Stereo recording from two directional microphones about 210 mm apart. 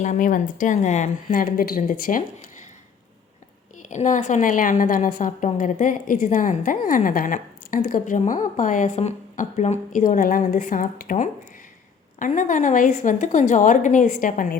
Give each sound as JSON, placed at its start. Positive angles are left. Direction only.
{"t": 0.0, "sound": "a woman's voice", "side_deg": 35}
{"t": 3.8, "sound": "a woman's voice", "side_deg": 35}